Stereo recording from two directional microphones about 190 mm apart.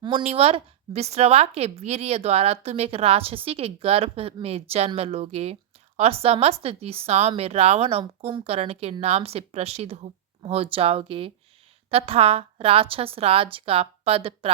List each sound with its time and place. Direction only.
0.0 s a woman's voice: 30° right (ahead or behind)